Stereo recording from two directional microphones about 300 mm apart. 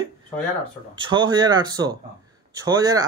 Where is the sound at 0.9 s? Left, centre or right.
Centre.